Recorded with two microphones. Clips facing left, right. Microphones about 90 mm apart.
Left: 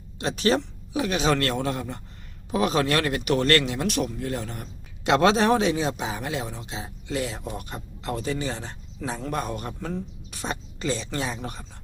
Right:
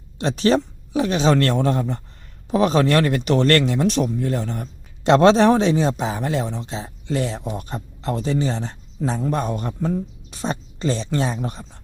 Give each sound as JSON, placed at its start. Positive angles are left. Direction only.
{"t": 0.2, "sound": "a man's voice", "side_deg": -35}
{"t": 3.8, "sound": "a man's voice", "side_deg": -25}